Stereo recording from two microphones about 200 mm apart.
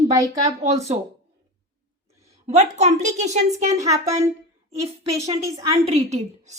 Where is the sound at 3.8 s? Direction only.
15° right (ahead or behind).